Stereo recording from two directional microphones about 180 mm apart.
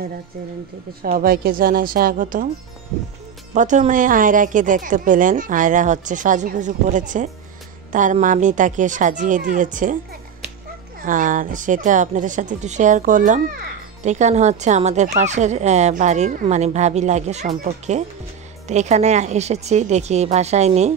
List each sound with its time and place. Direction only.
1.1 s speech: 55° right (ahead or behind)
3.5 s speech: 45° right (ahead or behind)
11.1 s speech: 45° right (ahead or behind)